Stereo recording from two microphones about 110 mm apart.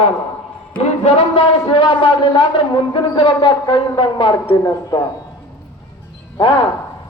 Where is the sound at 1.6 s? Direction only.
50° left (ahead or behind).